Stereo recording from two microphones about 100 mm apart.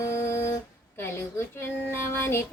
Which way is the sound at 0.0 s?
30° left (ahead or behind).